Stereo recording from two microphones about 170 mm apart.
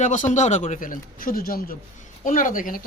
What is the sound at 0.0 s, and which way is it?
Speech, 45° left (ahead or behind).